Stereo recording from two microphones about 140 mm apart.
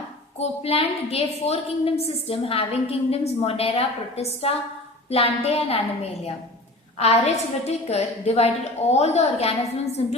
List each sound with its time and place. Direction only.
0.3 s a woman's voice: 45° left (ahead or behind)